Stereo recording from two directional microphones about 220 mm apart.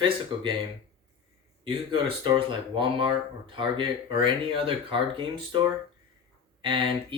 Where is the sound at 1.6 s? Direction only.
25° right (ahead or behind).